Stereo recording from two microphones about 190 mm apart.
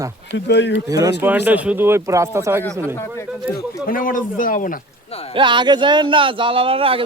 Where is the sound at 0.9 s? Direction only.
15° right (ahead or behind).